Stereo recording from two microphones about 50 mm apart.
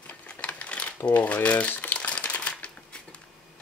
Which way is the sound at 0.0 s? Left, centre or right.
Left.